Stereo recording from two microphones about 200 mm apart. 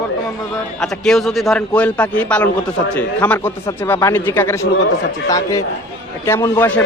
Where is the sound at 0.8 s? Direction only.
Centre (ahead or behind).